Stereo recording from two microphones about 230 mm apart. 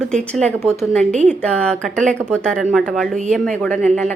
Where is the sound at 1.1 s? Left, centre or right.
Right.